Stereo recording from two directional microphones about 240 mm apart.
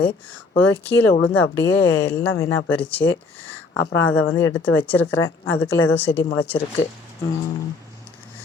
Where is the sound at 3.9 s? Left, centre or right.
Left.